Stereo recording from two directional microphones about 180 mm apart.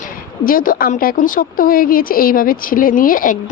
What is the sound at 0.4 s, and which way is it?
Speech, 50° left (ahead or behind).